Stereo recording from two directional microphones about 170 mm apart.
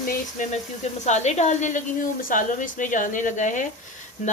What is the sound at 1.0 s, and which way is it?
Speech, 45° left (ahead or behind).